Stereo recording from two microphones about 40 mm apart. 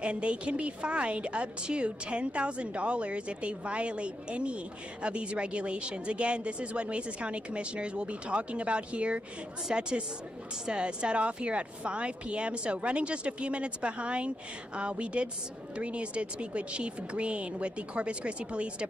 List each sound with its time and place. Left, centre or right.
0.0 s a woman's voice: right